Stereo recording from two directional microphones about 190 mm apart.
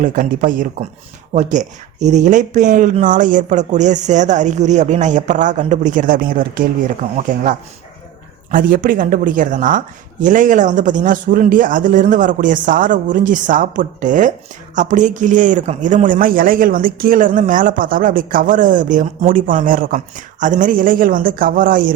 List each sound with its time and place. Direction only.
0.0 s speech: 45° right (ahead or behind)